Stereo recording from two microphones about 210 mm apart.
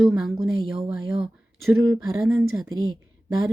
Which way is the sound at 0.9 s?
5° right (ahead or behind).